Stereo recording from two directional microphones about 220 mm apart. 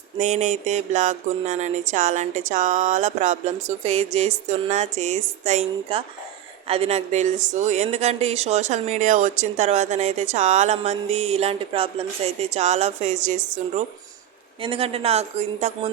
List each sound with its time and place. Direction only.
0.2 s a woman's voice: 30° right (ahead or behind)